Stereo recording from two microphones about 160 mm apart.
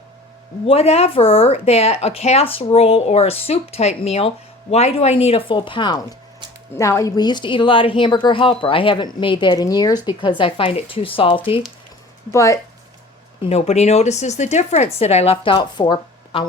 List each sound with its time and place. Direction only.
0.7 s speech: 40° left (ahead or behind)
12.3 s speech: 20° left (ahead or behind)
13.4 s speech: 40° left (ahead or behind)